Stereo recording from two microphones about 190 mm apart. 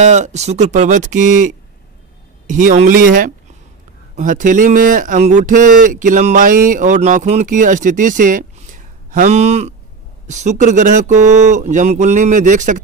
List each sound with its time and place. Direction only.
0.0 s speech: 35° right (ahead or behind)